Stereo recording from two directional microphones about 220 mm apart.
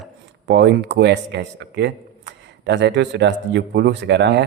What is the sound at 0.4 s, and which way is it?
Speech, 55° right (ahead or behind).